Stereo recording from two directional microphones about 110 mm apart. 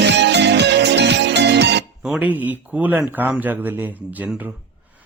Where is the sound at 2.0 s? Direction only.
10° right (ahead or behind).